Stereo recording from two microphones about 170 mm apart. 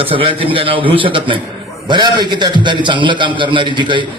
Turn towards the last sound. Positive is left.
turn(degrees=-30)  # may be behind; listen again after turning